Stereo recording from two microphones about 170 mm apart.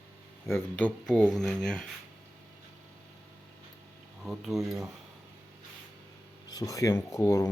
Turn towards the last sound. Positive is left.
turn(degrees=20)  # may be behind; listen again after turning